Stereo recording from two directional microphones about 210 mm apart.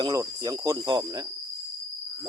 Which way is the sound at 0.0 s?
15° right (ahead or behind).